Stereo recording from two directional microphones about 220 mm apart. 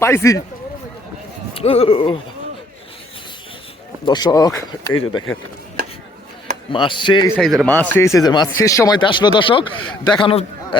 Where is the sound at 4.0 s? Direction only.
20° left (ahead or behind).